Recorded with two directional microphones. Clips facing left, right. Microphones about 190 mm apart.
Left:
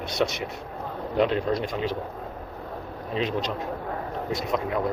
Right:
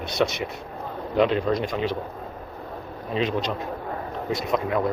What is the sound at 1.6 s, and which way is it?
Speech, 75° right (ahead or behind).